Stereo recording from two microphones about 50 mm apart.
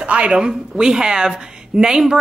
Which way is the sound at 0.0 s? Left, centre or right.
Right.